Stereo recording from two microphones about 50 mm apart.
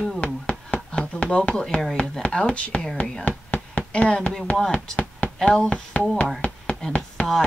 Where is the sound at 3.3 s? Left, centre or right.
Left.